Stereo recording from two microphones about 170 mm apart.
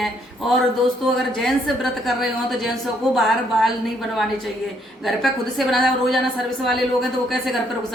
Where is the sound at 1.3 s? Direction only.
Centre (ahead or behind).